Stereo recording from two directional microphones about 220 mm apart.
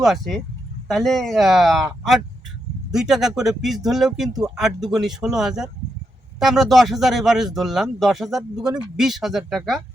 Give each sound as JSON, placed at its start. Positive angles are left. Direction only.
{"t": 0.0, "sound": "speech", "side_deg": 0}